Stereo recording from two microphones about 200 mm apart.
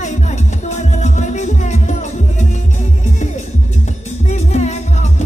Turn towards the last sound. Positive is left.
turn(degrees=35)  # may be behind; listen again after turning